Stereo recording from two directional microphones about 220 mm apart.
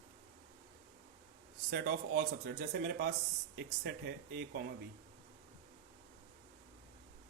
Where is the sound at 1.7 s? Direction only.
40° right (ahead or behind).